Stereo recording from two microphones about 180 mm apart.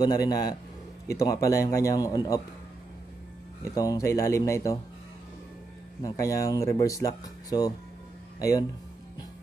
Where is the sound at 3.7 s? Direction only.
20° left (ahead or behind).